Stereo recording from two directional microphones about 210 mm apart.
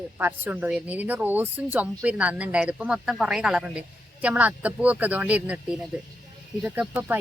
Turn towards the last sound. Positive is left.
turn(degrees=-10)  # may be behind; listen again after turning